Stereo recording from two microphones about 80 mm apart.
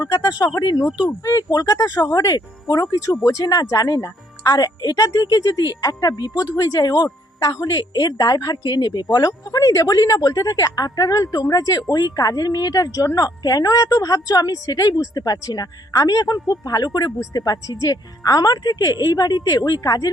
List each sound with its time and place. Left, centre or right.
0.0 s speech: left
1.2 s a woman's voice: left
2.8 s a woman's voice: left
9.1 s a woman's voice: left